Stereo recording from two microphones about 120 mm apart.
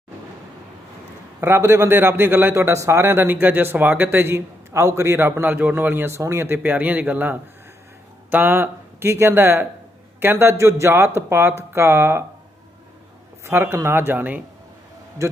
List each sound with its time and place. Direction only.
1.4 s a man's voice: 20° right (ahead or behind)
13.4 s a man's voice: 20° right (ahead or behind)